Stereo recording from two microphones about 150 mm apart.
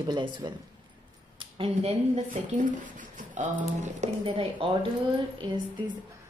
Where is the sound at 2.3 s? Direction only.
60° right (ahead or behind).